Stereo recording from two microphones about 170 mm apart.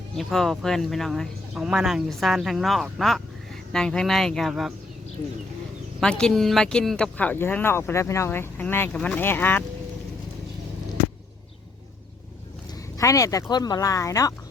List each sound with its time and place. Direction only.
0.2 s speech: centre (ahead or behind)
6.0 s speech: 5° left (ahead or behind)
13.0 s speech: 20° left (ahead or behind)